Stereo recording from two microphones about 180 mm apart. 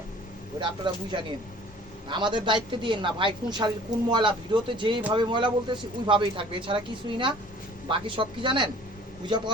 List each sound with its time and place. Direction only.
0.9 s speech: 25° right (ahead or behind)
2.0 s speech: 25° right (ahead or behind)